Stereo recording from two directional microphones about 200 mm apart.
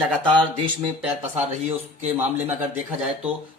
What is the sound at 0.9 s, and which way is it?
Speech, 10° right (ahead or behind).